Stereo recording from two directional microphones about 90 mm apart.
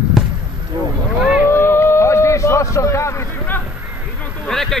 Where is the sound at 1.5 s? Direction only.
30° left (ahead or behind).